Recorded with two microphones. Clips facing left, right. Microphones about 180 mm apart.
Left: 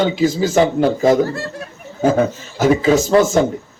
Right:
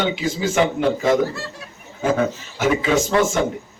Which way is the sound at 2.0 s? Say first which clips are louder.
Left 4 dB; 35° left (ahead or behind).